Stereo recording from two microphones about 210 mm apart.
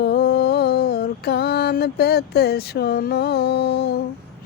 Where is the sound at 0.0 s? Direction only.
50° left (ahead or behind).